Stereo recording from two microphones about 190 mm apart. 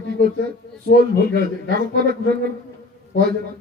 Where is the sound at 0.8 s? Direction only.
65° left (ahead or behind).